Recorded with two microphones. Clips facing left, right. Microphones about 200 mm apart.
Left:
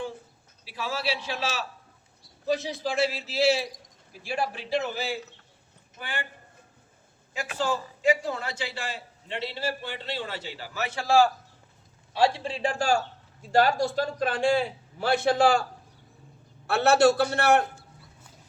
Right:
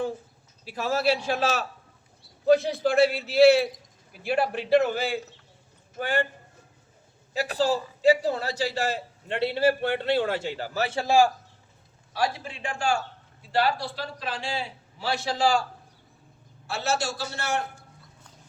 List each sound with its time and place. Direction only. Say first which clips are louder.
0.6 s a man's voice: right 6 dB; 45° right (ahead or behind)
7.3 s a man's voice: right 4 dB; 35° right (ahead or behind)
10.8 s a man's voice: right 4 dB; 30° right (ahead or behind)
11.0 s a man's voice: even; 15° right (ahead or behind)
12.1 s a man's voice: left 4 dB; 25° left (ahead or behind); by 15.6 s 55° left (ahead or behind)
16.6 s a man's voice: left 9 dB; 60° left (ahead or behind)